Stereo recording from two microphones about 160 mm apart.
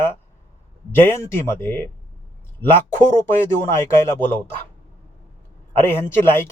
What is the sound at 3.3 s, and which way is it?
Speech, 15° left (ahead or behind).